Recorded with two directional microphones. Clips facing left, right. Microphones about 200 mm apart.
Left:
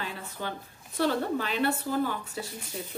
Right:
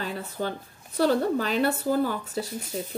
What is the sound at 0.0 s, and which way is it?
A woman's voice, 40° right (ahead or behind).